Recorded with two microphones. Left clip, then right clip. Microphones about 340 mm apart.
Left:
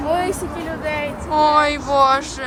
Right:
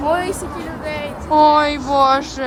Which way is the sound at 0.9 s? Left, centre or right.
Centre.